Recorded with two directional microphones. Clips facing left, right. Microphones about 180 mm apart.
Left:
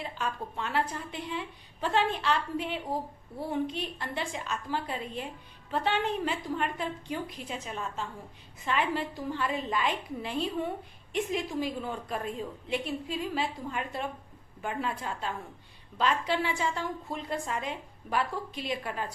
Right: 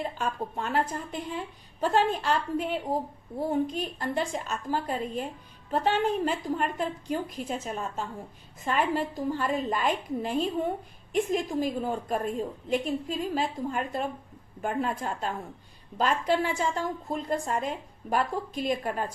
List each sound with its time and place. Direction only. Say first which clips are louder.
0.0 s a woman's voice: right 4 dB; 45° right (ahead or behind)